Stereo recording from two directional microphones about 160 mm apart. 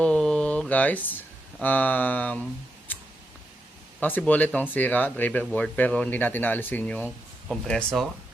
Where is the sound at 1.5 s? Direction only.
10° left (ahead or behind).